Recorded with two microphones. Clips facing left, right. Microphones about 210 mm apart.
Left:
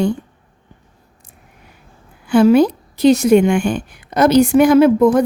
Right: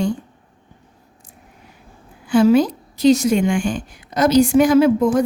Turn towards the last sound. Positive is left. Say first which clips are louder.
# left 3 dB
turn(degrees=60)  # may be behind; listen again after turning